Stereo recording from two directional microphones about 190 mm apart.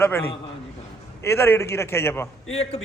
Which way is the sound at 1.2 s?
10° left (ahead or behind).